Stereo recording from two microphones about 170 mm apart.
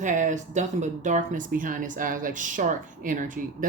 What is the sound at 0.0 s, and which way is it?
Speech, 45° right (ahead or behind).